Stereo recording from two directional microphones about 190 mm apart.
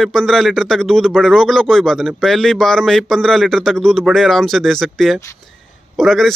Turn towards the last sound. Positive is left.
turn(degrees=0)  # may be behind; listen again after turning